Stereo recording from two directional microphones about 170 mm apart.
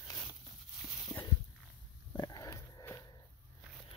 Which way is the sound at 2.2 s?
20° left (ahead or behind).